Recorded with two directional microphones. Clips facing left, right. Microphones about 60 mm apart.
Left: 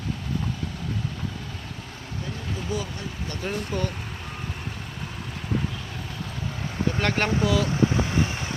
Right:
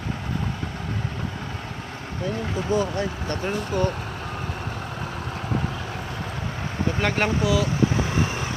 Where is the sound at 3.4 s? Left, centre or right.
Centre.